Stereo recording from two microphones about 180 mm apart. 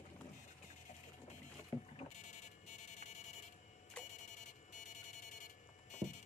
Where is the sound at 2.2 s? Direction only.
40° left (ahead or behind).